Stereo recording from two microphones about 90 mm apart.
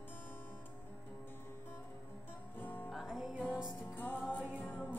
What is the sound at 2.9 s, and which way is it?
Music, centre (ahead or behind).